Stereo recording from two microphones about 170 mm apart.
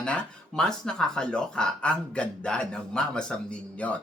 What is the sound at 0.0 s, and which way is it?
Speech, 5° left (ahead or behind).